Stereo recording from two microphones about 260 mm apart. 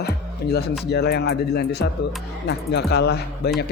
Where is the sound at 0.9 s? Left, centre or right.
Left.